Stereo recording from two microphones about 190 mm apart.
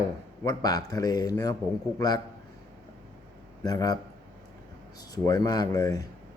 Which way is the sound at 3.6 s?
20° left (ahead or behind).